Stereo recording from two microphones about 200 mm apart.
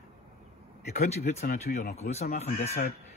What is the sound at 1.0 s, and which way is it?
Speech, 35° left (ahead or behind).